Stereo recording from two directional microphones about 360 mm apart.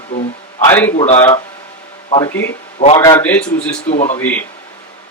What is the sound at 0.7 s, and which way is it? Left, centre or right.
A man's voice, centre.